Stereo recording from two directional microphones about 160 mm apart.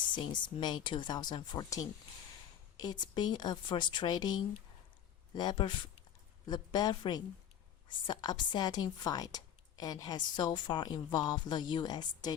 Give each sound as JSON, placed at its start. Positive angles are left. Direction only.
{"t": 0.1, "sound": "a woman's voice", "side_deg": 30}